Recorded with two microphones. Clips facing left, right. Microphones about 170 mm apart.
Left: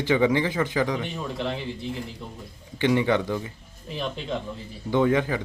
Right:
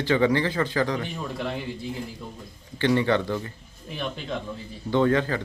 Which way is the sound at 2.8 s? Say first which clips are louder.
Even; 15° left (ahead or behind).